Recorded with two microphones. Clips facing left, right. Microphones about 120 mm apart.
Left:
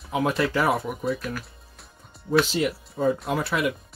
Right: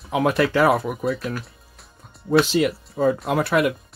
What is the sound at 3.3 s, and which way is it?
Speech, 65° right (ahead or behind).